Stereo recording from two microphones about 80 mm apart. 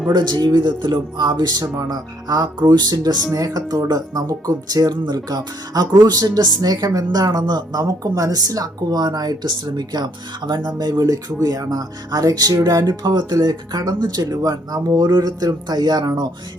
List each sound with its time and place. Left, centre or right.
0.1 s speech: right